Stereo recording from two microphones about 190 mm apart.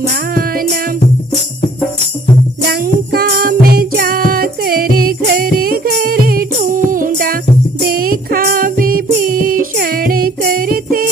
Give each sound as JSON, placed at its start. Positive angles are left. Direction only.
{"t": 0.1, "sound": "music", "side_deg": -50}
{"t": 2.7, "sound": "music", "side_deg": -55}